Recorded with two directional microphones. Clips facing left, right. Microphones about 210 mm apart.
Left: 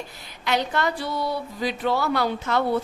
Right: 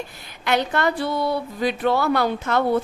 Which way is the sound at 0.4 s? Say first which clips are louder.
Right 3 dB; 55° right (ahead or behind).